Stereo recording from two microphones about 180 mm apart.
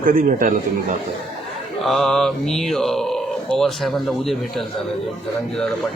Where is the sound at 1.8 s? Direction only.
Centre (ahead or behind).